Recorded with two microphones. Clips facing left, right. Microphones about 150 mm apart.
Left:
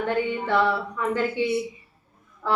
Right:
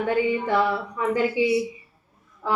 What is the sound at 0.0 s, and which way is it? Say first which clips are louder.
A woman's voice: right 3 dB; 10° right (ahead or behind).